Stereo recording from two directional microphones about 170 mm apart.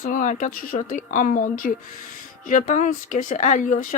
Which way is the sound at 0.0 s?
50° left (ahead or behind).